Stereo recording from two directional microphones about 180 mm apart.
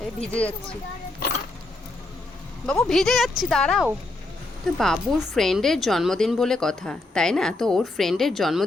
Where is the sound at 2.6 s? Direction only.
5° left (ahead or behind).